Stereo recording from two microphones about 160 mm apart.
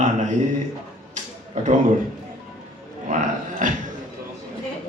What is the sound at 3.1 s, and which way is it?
Speech, 55° right (ahead or behind).